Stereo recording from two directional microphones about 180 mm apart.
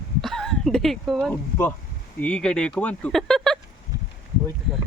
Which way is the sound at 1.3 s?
10° left (ahead or behind).